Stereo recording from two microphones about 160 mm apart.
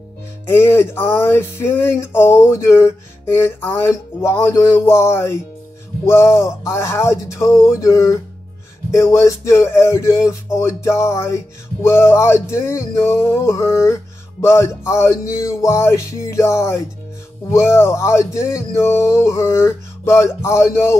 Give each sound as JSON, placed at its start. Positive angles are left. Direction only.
{"t": 0.5, "sound": "music", "side_deg": 15}